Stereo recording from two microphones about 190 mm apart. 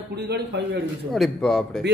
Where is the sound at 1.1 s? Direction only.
Centre (ahead or behind).